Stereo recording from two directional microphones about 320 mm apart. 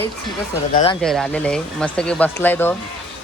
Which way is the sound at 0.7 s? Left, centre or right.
Centre.